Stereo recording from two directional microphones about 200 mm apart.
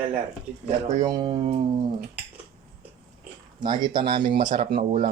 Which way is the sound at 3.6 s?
20° right (ahead or behind).